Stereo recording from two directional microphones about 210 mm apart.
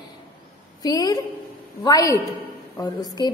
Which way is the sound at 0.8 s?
15° left (ahead or behind).